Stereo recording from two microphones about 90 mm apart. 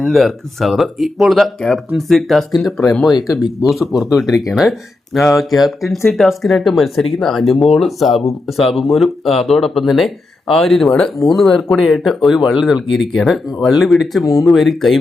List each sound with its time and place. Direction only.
0.0 s speech: centre (ahead or behind)